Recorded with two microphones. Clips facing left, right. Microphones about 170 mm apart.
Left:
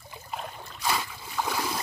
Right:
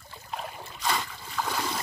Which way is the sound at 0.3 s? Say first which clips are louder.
Right 1 dB; 5° right (ahead or behind).